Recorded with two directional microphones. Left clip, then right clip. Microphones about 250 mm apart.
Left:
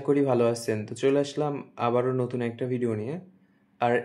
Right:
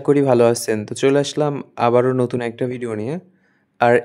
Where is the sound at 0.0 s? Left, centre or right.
Right.